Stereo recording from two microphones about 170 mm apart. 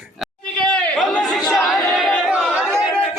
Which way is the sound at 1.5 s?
Centre (ahead or behind).